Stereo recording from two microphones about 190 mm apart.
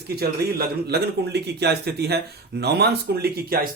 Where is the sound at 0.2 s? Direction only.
60° right (ahead or behind).